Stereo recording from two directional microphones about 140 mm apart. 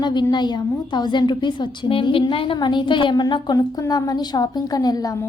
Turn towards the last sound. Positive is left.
turn(degrees=25)  # may be behind; listen again after turning